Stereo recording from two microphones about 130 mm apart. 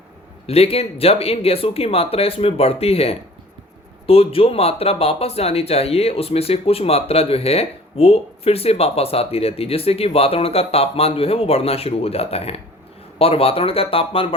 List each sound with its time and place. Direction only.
0.4 s speech: 50° left (ahead or behind)